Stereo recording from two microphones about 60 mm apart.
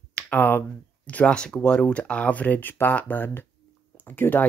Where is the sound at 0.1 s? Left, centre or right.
Left.